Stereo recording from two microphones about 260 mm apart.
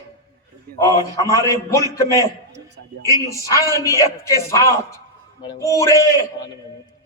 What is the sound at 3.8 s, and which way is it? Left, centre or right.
Speech, centre.